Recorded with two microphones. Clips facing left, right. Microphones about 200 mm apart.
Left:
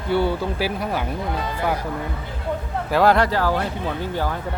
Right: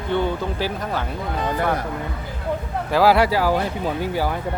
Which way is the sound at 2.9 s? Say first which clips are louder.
Right 1 dB; 5° right (ahead or behind).